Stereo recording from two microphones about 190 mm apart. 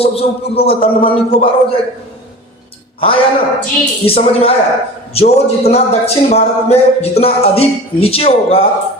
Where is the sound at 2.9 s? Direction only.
30° left (ahead or behind).